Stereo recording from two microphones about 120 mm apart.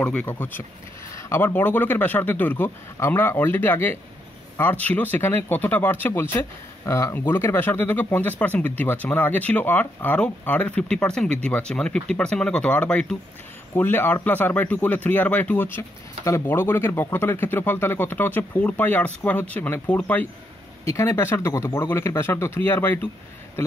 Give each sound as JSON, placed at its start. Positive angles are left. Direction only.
{"t": 0.0, "sound": "speech", "side_deg": 10}
{"t": 20.8, "sound": "speech", "side_deg": 25}